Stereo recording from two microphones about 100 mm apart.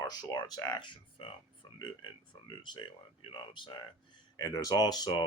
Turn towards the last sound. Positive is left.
turn(degrees=45)  # may be behind; listen again after turning